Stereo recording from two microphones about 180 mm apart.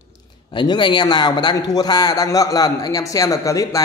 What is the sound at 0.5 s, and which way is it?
A man's voice, 25° left (ahead or behind).